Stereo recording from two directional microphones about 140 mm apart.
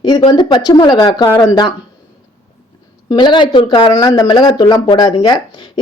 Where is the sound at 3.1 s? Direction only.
35° left (ahead or behind).